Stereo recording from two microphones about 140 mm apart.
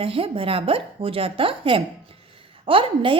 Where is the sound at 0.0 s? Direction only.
40° right (ahead or behind).